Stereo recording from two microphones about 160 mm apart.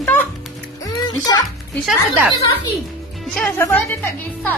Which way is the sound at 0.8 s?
25° left (ahead or behind).